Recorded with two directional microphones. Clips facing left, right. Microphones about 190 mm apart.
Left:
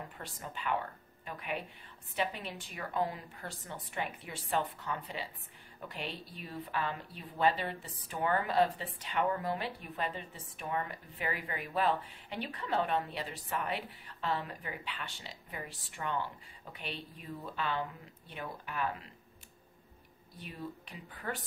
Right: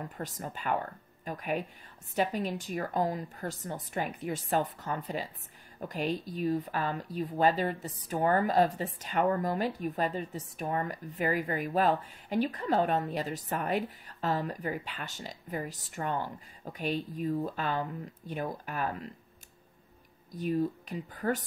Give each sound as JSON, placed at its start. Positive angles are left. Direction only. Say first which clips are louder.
{"t": 0.2, "sound": "a woman's voice", "louder": "right 4 dB", "side_deg": -40}
{"t": 20.2, "sound": "a woman's voice", "louder": "right 14 dB", "side_deg": -40}